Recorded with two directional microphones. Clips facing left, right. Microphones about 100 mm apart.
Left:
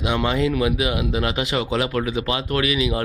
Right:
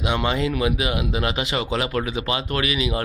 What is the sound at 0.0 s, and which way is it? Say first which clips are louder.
A man's voice: left 2 dB; centre (ahead or behind).